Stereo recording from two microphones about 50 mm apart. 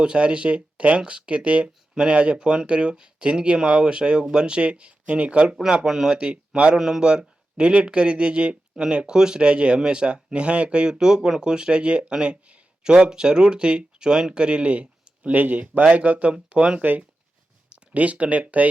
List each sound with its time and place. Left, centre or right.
0.0 s speech: centre
5.6 s speech: centre
6.7 s speech: centre
7.0 s speech: centre
17.9 s speech: right